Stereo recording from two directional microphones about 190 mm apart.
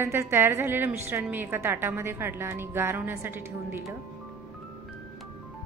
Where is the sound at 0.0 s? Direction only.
15° right (ahead or behind).